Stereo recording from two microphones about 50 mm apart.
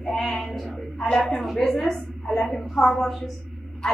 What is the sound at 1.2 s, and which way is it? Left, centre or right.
A woman's voice, centre.